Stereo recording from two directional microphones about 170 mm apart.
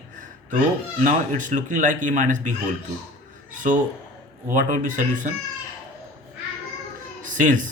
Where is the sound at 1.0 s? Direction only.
50° right (ahead or behind).